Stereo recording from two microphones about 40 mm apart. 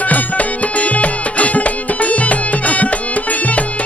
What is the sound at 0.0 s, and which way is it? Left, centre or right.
Music, left.